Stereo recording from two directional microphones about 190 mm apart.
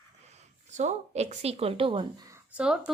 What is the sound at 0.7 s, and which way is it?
A woman's voice, 35° right (ahead or behind).